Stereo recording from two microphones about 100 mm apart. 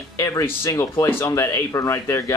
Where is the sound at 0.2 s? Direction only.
30° left (ahead or behind).